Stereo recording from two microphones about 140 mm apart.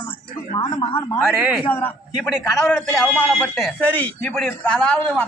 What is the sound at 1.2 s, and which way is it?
Speech, 5° right (ahead or behind).